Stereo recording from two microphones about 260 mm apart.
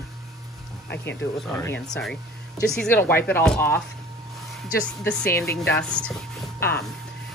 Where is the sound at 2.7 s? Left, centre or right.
Centre.